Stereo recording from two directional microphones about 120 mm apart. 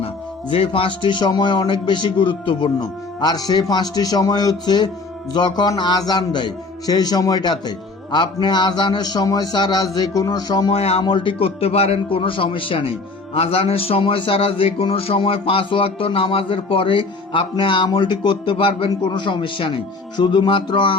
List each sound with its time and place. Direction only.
0.5 s a man's voice: 55° left (ahead or behind); by 10.7 s 35° left (ahead or behind)
10.7 s speech: 55° left (ahead or behind)
11.0 s a man's voice: 45° left (ahead or behind)